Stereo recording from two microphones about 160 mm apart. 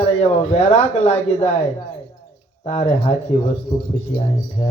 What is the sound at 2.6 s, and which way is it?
Speech, 40° left (ahead or behind).